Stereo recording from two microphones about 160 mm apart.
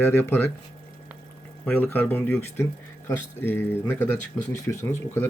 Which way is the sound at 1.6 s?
10° left (ahead or behind).